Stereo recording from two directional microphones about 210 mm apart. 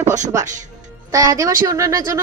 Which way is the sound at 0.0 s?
35° right (ahead or behind).